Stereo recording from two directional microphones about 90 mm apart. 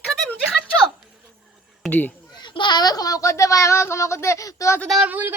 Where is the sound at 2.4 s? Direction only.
55° left (ahead or behind); by 4.8 s 35° left (ahead or behind).